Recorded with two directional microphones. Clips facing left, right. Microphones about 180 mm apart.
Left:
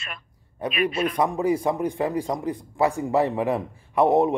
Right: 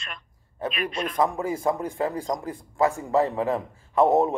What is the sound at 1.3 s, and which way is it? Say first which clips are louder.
Speech: left 3 dB; 15° left (ahead or behind).